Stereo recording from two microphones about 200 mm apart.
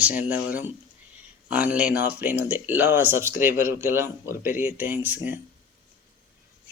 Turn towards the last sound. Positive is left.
turn(degrees=-10)  # may be behind; listen again after turning